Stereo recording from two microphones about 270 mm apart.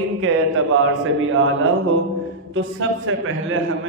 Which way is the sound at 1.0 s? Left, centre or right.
Right.